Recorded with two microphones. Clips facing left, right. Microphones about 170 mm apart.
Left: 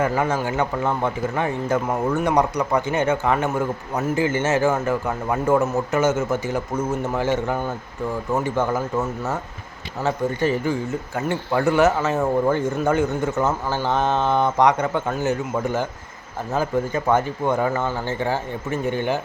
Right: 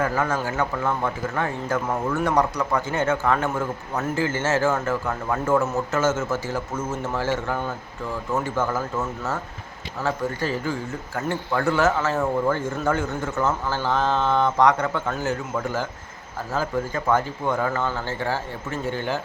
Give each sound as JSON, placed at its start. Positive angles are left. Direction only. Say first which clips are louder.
{"t": 0.0, "sound": "speech", "louder": "left 2 dB", "side_deg": 20}
{"t": 10.0, "sound": "speech", "louder": "left 4 dB", "side_deg": 20}